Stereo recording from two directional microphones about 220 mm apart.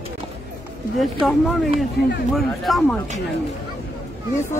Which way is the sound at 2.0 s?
50° left (ahead or behind).